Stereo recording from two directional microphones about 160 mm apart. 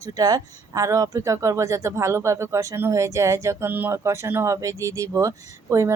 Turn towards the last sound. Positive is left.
turn(degrees=-20)  # may be behind; listen again after turning